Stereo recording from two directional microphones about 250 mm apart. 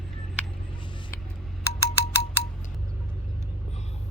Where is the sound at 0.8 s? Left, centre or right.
Centre.